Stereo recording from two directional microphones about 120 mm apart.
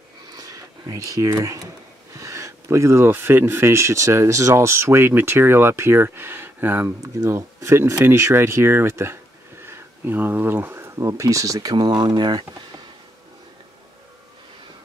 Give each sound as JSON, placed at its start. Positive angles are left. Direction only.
{"t": 0.4, "sound": "speech", "side_deg": -30}